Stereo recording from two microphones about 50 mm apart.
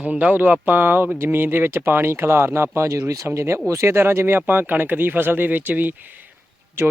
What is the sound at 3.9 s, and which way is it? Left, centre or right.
Speech, right.